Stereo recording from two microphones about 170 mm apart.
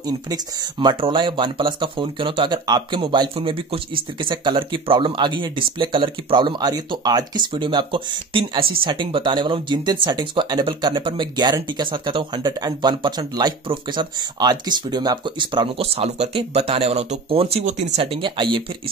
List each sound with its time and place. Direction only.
0.0 s speech: 20° right (ahead or behind)